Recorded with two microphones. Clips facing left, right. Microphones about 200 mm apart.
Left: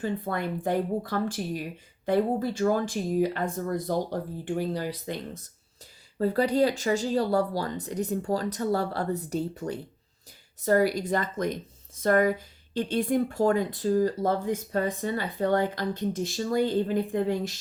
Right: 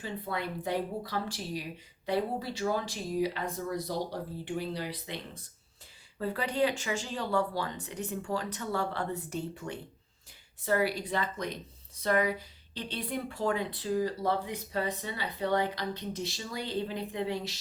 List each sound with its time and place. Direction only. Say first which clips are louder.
0.0 s speech: left 6 dB; 50° left (ahead or behind)